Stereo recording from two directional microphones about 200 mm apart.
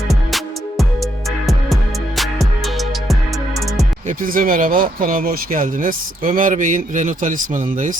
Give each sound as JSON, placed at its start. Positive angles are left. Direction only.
{"t": 0.1, "sound": "music", "side_deg": 0}
{"t": 4.2, "sound": "speech", "side_deg": -45}